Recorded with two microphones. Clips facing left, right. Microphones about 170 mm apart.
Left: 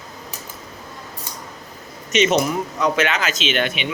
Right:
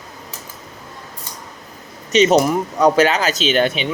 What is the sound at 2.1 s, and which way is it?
Speech, 35° right (ahead or behind).